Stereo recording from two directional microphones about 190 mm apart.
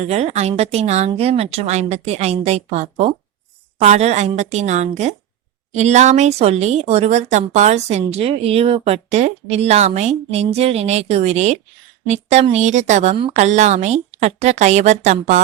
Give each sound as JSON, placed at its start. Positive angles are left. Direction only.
{"t": 0.0, "sound": "speech", "side_deg": -35}